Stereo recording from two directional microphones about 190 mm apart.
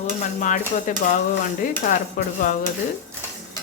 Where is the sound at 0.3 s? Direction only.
40° left (ahead or behind).